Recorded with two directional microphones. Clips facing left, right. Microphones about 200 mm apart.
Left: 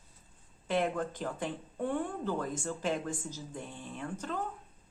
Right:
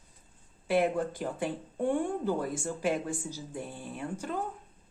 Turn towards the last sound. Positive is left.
turn(degrees=-10)  # may be behind; listen again after turning